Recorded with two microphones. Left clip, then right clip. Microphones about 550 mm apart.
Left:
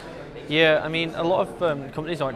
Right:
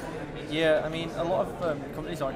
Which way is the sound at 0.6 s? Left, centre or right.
Left.